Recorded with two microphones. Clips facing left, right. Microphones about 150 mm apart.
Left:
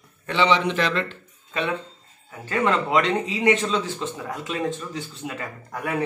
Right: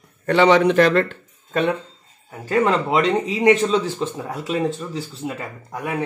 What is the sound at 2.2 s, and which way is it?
A man's voice, 35° right (ahead or behind).